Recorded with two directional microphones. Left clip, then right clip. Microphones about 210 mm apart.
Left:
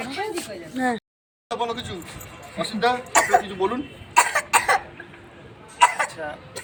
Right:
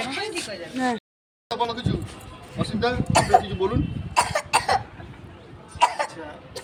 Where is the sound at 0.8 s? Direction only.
5° right (ahead or behind).